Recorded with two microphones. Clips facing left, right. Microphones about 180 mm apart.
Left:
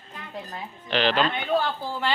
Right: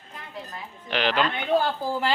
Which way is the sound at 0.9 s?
10° right (ahead or behind).